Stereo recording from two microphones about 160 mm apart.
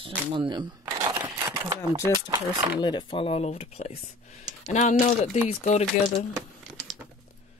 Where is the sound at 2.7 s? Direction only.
25° left (ahead or behind); by 6.3 s 45° left (ahead or behind).